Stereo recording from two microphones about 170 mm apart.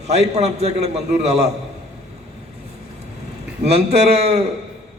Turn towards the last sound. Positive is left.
turn(degrees=-35)  # may be behind; listen again after turning